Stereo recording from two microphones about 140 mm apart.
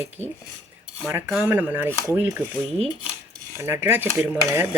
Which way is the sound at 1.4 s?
15° right (ahead or behind).